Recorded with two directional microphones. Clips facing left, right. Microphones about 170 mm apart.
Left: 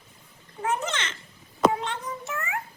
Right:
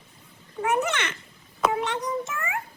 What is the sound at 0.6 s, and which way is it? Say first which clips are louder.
Speech: right 4 dB; 65° right (ahead or behind).